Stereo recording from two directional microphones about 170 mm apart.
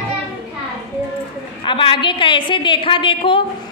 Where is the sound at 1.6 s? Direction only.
30° left (ahead or behind).